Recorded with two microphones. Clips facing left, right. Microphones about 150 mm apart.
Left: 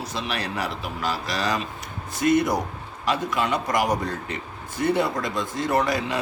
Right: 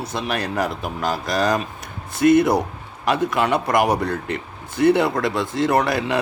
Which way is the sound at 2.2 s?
60° right (ahead or behind).